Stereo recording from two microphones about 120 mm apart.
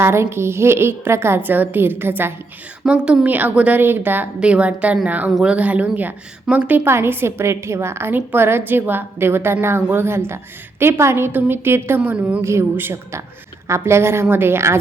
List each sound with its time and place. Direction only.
0.0 s a woman's voice: 20° right (ahead or behind)
2.8 s a woman's voice: 5° right (ahead or behind)